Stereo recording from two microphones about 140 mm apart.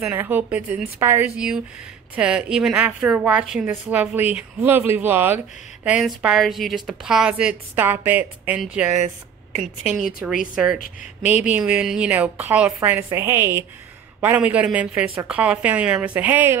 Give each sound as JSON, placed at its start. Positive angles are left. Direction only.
{"t": 0.0, "sound": "a woman's voice", "side_deg": -15}
{"t": 1.3, "sound": "a woman's voice", "side_deg": -5}
{"t": 10.4, "sound": "a woman's voice", "side_deg": -5}